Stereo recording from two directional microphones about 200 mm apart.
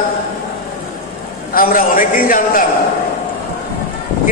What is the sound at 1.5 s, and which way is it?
A man's voice, 45° left (ahead or behind).